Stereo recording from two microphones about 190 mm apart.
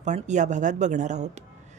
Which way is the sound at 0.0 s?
40° right (ahead or behind).